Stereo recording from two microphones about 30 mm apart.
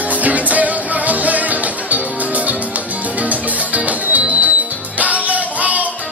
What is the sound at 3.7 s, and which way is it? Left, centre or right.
Music, right.